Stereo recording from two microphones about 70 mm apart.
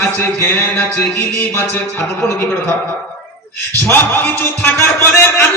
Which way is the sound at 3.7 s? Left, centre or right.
Left.